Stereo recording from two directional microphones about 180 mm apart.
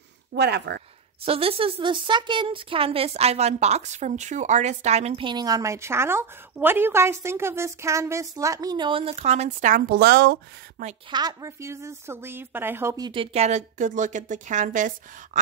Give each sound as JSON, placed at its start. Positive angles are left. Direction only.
{"t": 0.3, "sound": "speech", "side_deg": -70}
{"t": 1.2, "sound": "speech", "side_deg": -30}
{"t": 11.1, "sound": "speech", "side_deg": -20}